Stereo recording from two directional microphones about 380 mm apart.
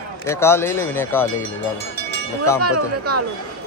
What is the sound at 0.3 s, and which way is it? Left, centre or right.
Speech, centre.